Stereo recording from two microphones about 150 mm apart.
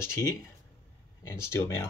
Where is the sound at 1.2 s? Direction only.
15° left (ahead or behind).